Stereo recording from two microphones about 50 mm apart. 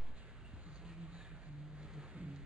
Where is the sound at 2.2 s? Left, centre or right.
Right.